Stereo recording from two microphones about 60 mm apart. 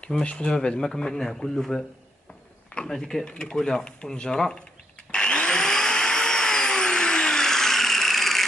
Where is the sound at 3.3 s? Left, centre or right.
Centre.